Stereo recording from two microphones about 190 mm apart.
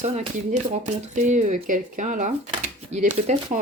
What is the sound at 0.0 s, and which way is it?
Speech, 35° right (ahead or behind).